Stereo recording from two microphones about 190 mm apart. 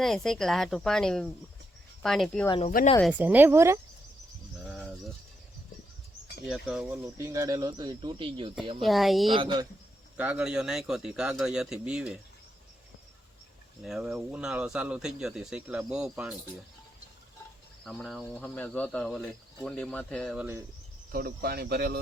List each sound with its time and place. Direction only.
0.0 s speech: centre (ahead or behind)
2.5 s speech: 30° left (ahead or behind)
3.0 s speech: 10° right (ahead or behind)
4.8 s a sound: centre (ahead or behind)
6.5 s speech: 5° right (ahead or behind); by 8.5 s 25° right (ahead or behind)
8.8 s speech: centre (ahead or behind)
9.3 s speech: 25° right (ahead or behind)
10.2 s speech: 5° right (ahead or behind)
13.8 s speech: 5° right (ahead or behind)
17.8 s speech: centre (ahead or behind)
21.1 s speech: 50° right (ahead or behind)